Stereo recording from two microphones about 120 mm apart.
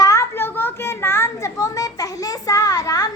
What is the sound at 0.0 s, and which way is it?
Children playing, 25° left (ahead or behind).